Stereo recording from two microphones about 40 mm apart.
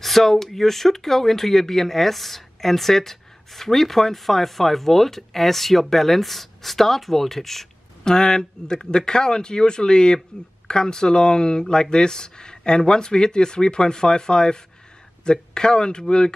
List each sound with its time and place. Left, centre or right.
0.0 s speech: centre
8.0 s speech: centre